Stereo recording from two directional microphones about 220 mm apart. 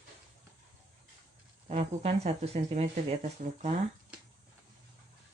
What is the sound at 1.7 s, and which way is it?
Speech, 30° right (ahead or behind).